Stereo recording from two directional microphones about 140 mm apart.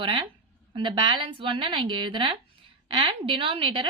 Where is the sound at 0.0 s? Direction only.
40° right (ahead or behind).